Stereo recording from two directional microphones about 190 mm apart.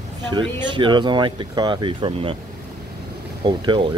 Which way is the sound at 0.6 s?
25° right (ahead or behind).